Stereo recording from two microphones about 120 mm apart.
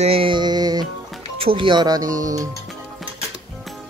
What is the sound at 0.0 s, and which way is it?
Music, 50° right (ahead or behind).